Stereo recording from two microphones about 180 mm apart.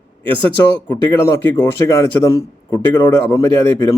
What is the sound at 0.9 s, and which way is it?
Speech, 15° left (ahead or behind).